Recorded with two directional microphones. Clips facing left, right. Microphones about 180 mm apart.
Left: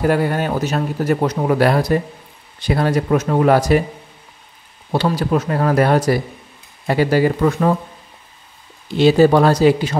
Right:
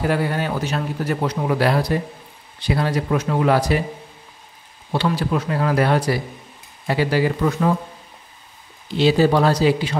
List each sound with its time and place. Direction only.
0.1 s speech: 50° left (ahead or behind)
4.9 s speech: 40° left (ahead or behind)
8.9 s speech: 50° left (ahead or behind)